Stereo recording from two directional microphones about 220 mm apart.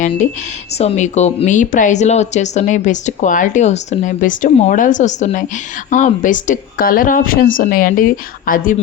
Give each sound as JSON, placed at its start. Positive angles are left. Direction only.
{"t": 0.8, "sound": "speech", "side_deg": 30}